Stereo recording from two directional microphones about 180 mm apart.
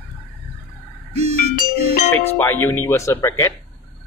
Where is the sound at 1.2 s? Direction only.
35° right (ahead or behind).